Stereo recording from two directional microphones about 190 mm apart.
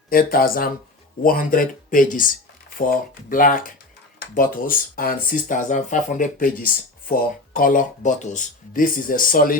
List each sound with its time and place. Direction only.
0.1 s speech: 50° left (ahead or behind)